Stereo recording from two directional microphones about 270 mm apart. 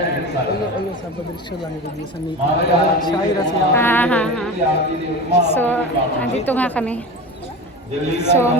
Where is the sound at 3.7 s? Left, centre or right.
Centre.